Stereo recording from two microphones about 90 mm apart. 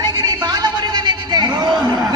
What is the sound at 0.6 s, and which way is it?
Chatter, 55° right (ahead or behind).